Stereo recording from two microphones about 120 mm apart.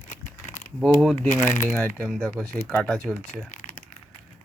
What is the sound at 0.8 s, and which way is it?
Speech, centre (ahead or behind).